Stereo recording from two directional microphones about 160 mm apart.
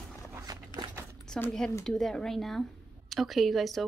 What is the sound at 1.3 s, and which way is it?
Speech, 5° left (ahead or behind).